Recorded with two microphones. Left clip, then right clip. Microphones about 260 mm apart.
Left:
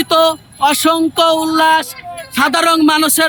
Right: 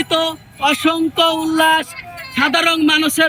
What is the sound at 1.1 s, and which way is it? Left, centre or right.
Music, left.